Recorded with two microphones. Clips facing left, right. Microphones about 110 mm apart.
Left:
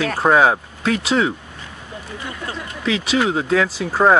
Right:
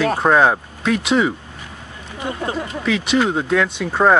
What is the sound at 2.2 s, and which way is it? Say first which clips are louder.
Speech: right 8 dB; 25° right (ahead or behind).